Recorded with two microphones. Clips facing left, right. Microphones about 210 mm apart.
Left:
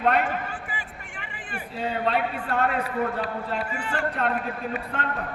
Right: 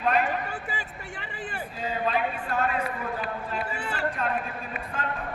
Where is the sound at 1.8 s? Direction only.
70° left (ahead or behind).